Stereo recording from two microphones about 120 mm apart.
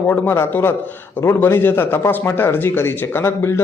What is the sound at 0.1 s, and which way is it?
A man's voice, 15° left (ahead or behind).